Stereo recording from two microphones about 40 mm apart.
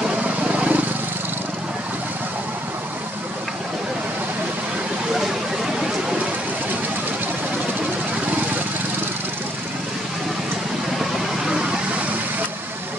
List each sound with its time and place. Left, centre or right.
0.5 s vehicle: right
11.0 s vehicle: centre